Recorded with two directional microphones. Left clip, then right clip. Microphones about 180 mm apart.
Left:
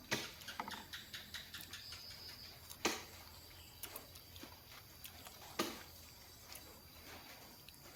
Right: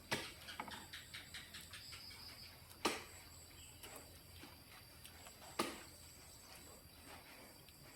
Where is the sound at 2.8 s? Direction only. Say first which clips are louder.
Left 1 dB; centre (ahead or behind).